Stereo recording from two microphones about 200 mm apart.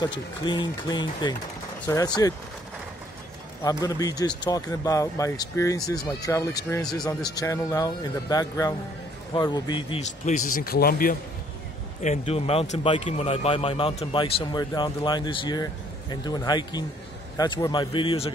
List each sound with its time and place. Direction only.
0.0 s speech: 20° left (ahead or behind)
3.6 s speech: 20° left (ahead or behind); by 11.1 s 45° left (ahead or behind)
12.0 s speech: 35° left (ahead or behind)